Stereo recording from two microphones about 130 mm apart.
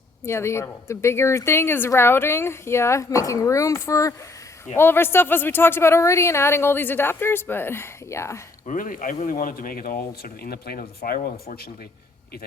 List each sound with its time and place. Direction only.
0.3 s a woman's voice: 20° left (ahead or behind)
8.6 s speech: 90° left
11.0 s speech: 90° left